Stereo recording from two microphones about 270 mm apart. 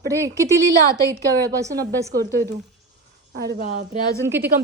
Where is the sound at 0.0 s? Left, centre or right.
Centre.